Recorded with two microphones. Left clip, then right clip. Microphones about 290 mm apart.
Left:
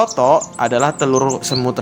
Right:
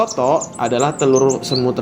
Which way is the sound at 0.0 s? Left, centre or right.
Left.